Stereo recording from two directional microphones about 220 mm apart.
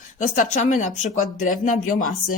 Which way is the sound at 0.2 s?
35° left (ahead or behind).